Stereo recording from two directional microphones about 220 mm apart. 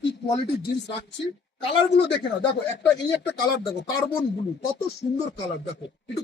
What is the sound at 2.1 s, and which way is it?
Speech, 50° left (ahead or behind).